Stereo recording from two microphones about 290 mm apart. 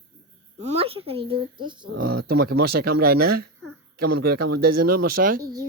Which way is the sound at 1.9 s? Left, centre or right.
Right.